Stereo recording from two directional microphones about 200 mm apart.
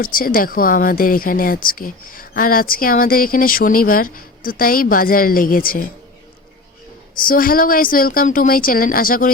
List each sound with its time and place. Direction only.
0.0 s speech: 45° left (ahead or behind)
7.2 s speech: 45° left (ahead or behind)